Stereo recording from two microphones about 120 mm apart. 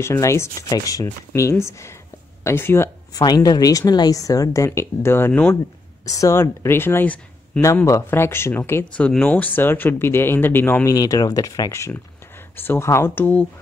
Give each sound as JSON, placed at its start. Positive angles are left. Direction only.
{"t": 0.0, "sound": "speech", "side_deg": 25}
{"t": 3.2, "sound": "speech", "side_deg": 35}
{"t": 6.0, "sound": "speech", "side_deg": 30}
{"t": 7.6, "sound": "speech", "side_deg": 25}